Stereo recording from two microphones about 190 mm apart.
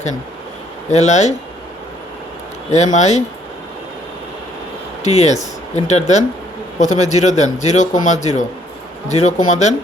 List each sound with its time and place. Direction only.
0.9 s speech: 40° left (ahead or behind)
2.7 s speech: 40° left (ahead or behind)
5.0 s speech: 35° left (ahead or behind)